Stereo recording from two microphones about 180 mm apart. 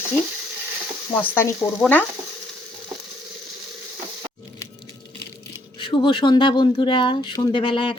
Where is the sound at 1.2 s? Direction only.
10° left (ahead or behind).